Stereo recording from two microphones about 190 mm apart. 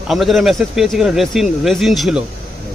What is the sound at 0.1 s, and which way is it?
Speech, centre (ahead or behind).